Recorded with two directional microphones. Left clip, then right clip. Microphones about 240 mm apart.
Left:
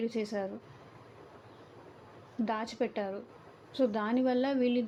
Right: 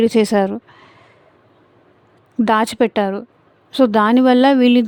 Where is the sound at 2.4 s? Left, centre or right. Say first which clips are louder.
Right 18 dB; right.